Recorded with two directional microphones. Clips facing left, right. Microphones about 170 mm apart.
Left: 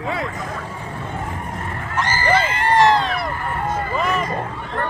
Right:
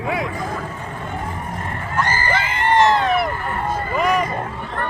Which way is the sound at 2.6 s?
20° right (ahead or behind).